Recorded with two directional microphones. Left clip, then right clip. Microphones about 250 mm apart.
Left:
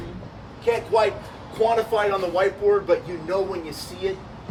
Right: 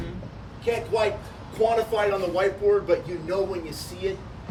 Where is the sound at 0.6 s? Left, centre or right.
Centre.